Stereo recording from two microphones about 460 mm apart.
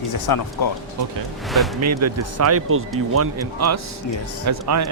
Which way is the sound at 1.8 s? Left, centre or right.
Right.